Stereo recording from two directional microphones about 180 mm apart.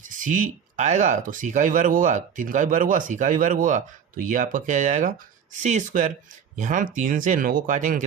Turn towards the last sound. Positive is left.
turn(degrees=-45)  # may be behind; listen again after turning